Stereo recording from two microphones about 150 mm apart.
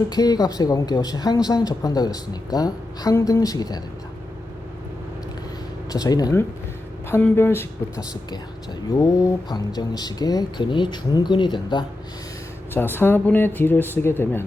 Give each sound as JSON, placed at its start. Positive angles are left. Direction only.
{"t": 0.1, "sound": "speech", "side_deg": 25}
{"t": 5.9, "sound": "speech", "side_deg": 25}
{"t": 7.1, "sound": "speech", "side_deg": 15}
{"t": 12.7, "sound": "speech", "side_deg": 15}